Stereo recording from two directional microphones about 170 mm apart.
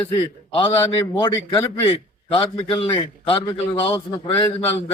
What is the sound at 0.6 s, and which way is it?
A man's voice, 30° left (ahead or behind).